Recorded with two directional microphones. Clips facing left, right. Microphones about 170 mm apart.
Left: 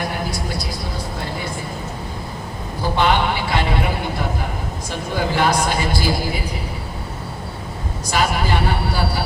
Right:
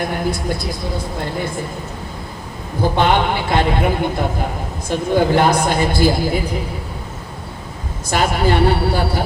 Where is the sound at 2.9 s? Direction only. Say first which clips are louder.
Right 1 dB; 55° right (ahead or behind).